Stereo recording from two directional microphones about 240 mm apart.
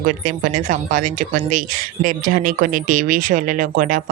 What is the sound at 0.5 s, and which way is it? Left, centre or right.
Speech, right.